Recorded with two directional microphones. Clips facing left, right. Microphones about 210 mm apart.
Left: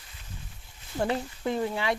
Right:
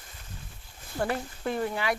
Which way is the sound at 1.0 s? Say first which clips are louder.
Left 2 dB; 20° left (ahead or behind).